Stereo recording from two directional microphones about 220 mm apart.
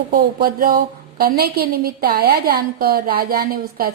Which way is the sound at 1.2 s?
45° right (ahead or behind).